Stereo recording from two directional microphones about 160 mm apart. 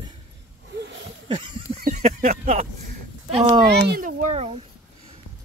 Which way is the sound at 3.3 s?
35° right (ahead or behind).